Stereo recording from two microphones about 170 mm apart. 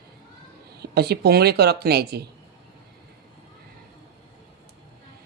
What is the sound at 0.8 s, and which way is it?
Speech, 70° right (ahead or behind).